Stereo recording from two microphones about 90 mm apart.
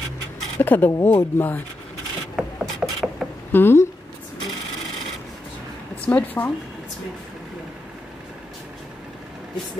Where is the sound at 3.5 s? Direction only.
25° left (ahead or behind).